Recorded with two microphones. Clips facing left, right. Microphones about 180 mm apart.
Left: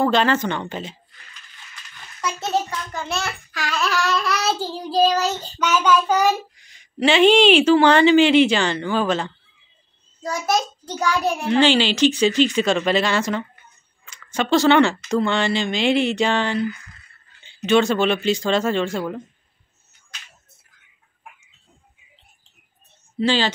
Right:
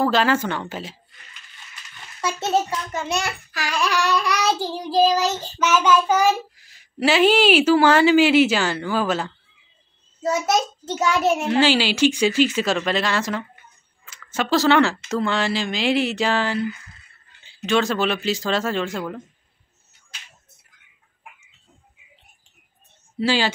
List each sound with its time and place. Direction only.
0.0 s speech: 5° right (ahead or behind)
2.2 s a child's voice: 25° right (ahead or behind); by 9.3 s 5° right (ahead or behind)
10.2 s a child's voice: 20° right (ahead or behind)
11.4 s speech: 5° right (ahead or behind)
23.1 s speech: 10° right (ahead or behind)